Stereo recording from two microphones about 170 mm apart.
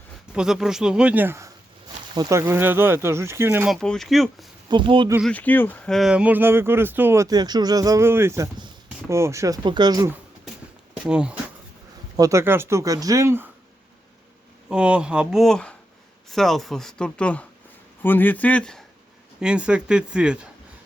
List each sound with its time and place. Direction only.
0.3 s speech: 5° right (ahead or behind)
3.7 s speech: centre (ahead or behind)
4.7 s speech: 30° right (ahead or behind)
5.2 s speech: 10° left (ahead or behind); by 10.0 s 25° right (ahead or behind)
11.0 s speech: 5° right (ahead or behind)
12.1 s speech: 20° right (ahead or behind)
14.7 s speech: 5° right (ahead or behind)
19.4 s speech: 5° right (ahead or behind)